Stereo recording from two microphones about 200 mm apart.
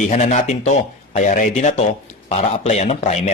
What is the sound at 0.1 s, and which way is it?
A man's voice, 35° left (ahead or behind).